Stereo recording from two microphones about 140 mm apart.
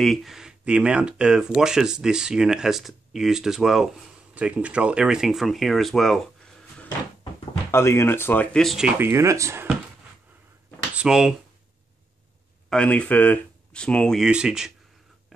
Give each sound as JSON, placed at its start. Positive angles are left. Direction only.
{"t": 0.0, "sound": "speech", "side_deg": 0}
{"t": 7.7, "sound": "speech", "side_deg": 20}
{"t": 8.6, "sound": "speech", "side_deg": -5}
{"t": 8.9, "sound": "speech", "side_deg": -15}
{"t": 11.0, "sound": "speech", "side_deg": -5}
{"t": 12.6, "sound": "speech", "side_deg": 10}
{"t": 14.2, "sound": "speech", "side_deg": -5}